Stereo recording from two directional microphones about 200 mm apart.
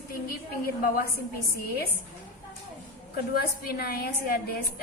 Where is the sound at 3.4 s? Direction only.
50° left (ahead or behind).